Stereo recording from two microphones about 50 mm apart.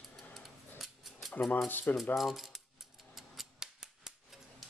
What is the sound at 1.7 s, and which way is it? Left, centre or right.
Speech, left.